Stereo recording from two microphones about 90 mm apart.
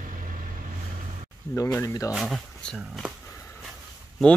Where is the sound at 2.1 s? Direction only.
Centre (ahead or behind).